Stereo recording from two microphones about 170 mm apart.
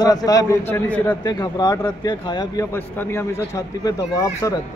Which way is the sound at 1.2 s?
20° left (ahead or behind).